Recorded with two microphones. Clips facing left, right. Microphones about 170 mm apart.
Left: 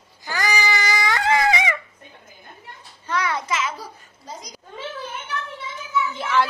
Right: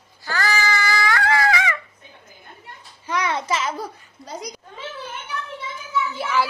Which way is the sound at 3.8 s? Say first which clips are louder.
Right 6 dB; 65° right (ahead or behind).